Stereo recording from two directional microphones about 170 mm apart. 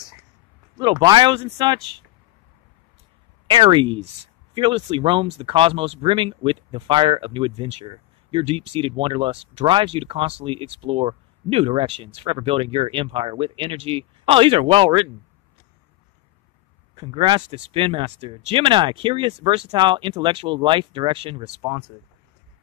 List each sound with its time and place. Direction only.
0.7 s speech: 25° right (ahead or behind)
3.4 s speech: 30° right (ahead or behind)
16.9 s speech: 30° right (ahead or behind)